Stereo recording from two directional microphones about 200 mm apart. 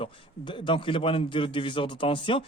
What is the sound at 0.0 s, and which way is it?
A man's voice, 25° left (ahead or behind).